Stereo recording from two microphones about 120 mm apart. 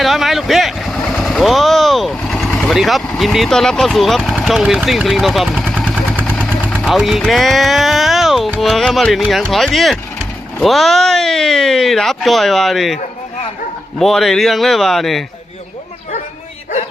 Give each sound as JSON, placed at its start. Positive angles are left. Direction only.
{"t": 0.0, "sound": "speech", "side_deg": 0}
{"t": 5.5, "sound": "vehicle", "side_deg": -10}
{"t": 6.1, "sound": "vehicle", "side_deg": 10}
{"t": 6.8, "sound": "speech", "side_deg": 0}
{"t": 14.0, "sound": "speech", "side_deg": 0}